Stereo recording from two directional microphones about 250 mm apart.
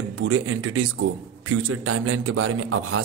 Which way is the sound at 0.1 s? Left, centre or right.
Right.